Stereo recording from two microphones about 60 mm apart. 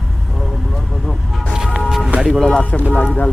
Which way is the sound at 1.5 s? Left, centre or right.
Centre.